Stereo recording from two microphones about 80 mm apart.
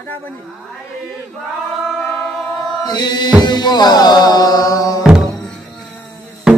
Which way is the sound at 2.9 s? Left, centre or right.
Left.